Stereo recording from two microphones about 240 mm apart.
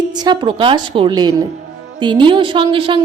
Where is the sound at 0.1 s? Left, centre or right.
Centre.